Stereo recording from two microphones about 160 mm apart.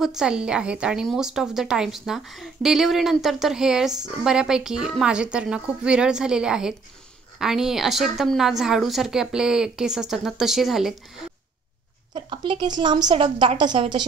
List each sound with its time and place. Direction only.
0.0 s a woman's voice: 5° right (ahead or behind)
12.1 s a woman's voice: 30° right (ahead or behind)